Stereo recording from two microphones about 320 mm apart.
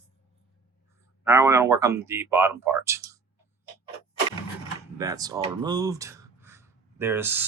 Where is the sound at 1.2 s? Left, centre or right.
Centre.